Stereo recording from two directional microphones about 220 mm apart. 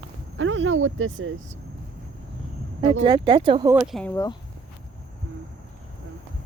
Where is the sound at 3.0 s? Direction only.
20° right (ahead or behind).